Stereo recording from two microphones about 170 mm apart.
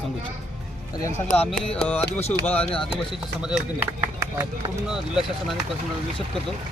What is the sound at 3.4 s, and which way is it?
Speech, 10° right (ahead or behind).